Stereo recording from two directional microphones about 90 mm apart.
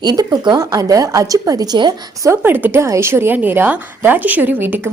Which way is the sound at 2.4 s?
20° right (ahead or behind).